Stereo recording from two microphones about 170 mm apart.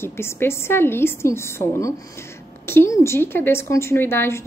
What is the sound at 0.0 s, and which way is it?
A woman's voice, 15° left (ahead or behind).